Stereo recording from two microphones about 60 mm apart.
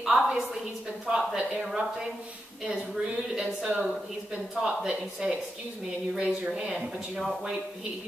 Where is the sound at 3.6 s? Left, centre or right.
Centre.